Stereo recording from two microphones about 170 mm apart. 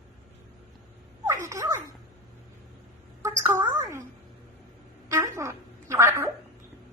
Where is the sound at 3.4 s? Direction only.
20° right (ahead or behind).